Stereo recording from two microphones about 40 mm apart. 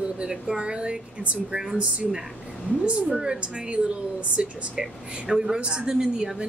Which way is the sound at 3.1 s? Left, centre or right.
Centre.